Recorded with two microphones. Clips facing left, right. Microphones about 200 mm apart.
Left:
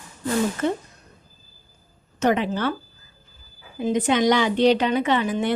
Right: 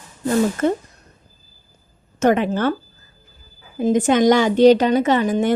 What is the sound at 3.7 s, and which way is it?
A woman's voice, 45° right (ahead or behind).